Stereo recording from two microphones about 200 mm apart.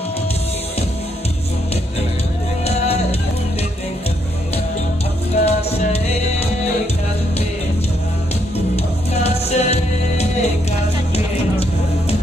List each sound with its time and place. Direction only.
2.6 s music: 30° left (ahead or behind)
5.3 s music: 30° left (ahead or behind)
8.7 s music: 30° left (ahead or behind)